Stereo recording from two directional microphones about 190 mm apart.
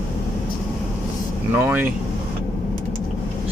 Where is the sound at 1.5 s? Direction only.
10° right (ahead or behind).